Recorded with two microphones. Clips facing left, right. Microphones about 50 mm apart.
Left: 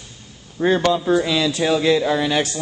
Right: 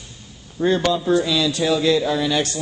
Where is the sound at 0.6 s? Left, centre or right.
Left.